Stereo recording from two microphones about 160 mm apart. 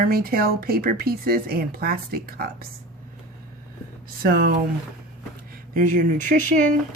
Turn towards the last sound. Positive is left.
turn(degrees=-55)  # may be behind; listen again after turning